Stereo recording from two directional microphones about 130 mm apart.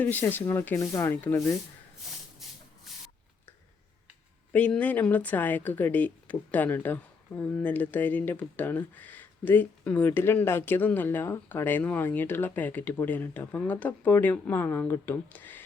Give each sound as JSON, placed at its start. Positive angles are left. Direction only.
{"t": 0.0, "sound": "a woman's voice", "side_deg": 15}
{"t": 2.4, "sound": "rub", "side_deg": 0}
{"t": 4.5, "sound": "a woman's voice", "side_deg": 10}